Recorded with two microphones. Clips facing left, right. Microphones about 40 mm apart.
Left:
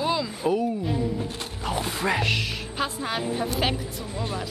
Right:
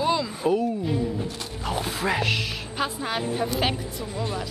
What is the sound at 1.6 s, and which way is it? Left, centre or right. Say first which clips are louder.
A woman's voice: even; centre.